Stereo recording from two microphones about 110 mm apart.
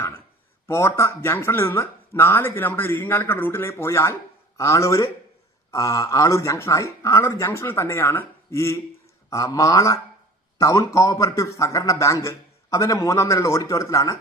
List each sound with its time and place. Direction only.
0.7 s speech: 25° left (ahead or behind)